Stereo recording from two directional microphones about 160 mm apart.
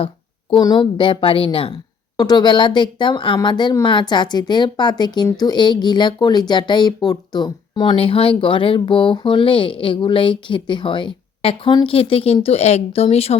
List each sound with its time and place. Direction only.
0.5 s a woman's voice: 30° left (ahead or behind)